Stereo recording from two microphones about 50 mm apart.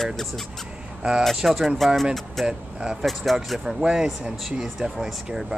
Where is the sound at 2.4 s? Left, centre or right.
Centre.